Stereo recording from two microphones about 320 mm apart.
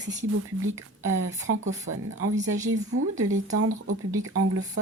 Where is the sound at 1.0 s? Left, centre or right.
Right.